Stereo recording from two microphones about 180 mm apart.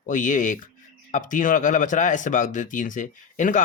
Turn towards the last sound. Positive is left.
turn(degrees=45)  # may be behind; listen again after turning